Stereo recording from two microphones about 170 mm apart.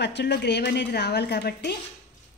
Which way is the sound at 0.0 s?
90° left.